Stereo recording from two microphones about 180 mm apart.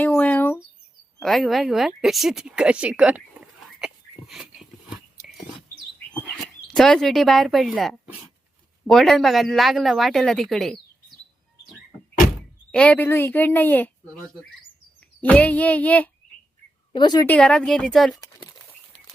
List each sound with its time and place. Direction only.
0.0 s bird: 5° left (ahead or behind)
1.2 s speech: centre (ahead or behind)
3.8 s a sound: centre (ahead or behind)
6.1 s speech: centre (ahead or behind)
12.7 s speech: 5° left (ahead or behind)
15.2 s speech: 10° left (ahead or behind)
16.9 s a woman's voice: 25° left (ahead or behind)
17.2 s speech: 5° left (ahead or behind)
18.1 s speech: 20° left (ahead or behind)